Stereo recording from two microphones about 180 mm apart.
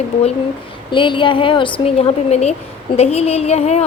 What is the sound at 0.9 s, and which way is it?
A woman's voice, 25° left (ahead or behind).